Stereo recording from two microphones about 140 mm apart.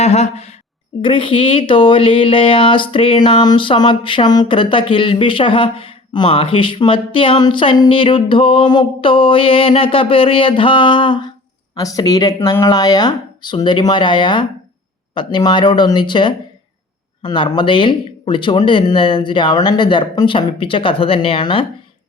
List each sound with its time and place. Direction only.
0.0 s a woman's voice: 50° left (ahead or behind)
1.0 s speech: 35° left (ahead or behind)